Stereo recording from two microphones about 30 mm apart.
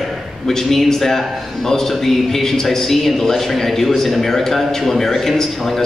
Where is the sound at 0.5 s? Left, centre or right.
Centre.